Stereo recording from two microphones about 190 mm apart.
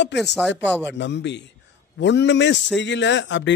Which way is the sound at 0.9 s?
70° left (ahead or behind).